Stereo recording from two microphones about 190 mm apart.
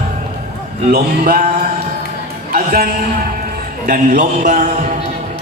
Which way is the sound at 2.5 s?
50° right (ahead or behind).